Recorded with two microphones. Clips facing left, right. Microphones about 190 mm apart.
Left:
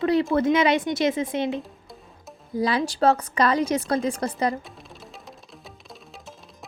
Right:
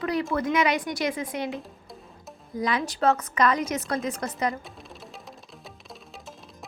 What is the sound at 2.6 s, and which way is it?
A woman's voice, 30° left (ahead or behind).